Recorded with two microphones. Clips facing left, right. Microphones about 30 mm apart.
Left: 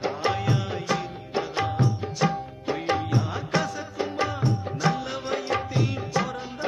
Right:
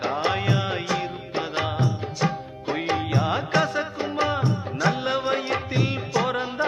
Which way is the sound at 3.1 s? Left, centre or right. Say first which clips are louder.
Right 4 dB; right.